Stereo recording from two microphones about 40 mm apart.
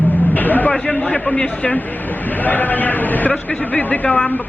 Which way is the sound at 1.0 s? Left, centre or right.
Left.